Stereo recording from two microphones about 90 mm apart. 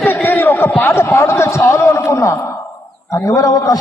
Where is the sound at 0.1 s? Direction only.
25° left (ahead or behind).